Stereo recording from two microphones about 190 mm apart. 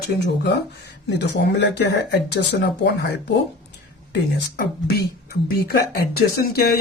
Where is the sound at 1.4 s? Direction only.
65° left (ahead or behind).